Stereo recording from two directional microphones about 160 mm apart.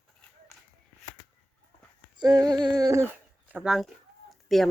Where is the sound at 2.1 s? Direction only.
25° right (ahead or behind); by 3.9 s 5° right (ahead or behind).